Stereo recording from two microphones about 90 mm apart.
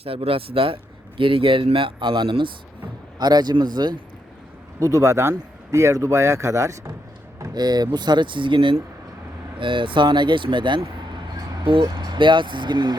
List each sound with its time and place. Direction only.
0.0 s speech: 90° right; by 2.5 s 60° right (ahead or behind)
3.2 s speech: 50° right (ahead or behind)
4.8 s speech: 35° right (ahead or behind)
7.5 s speech: 50° right (ahead or behind)
11.6 s speech: 75° right (ahead or behind); by 13.0 s 55° right (ahead or behind)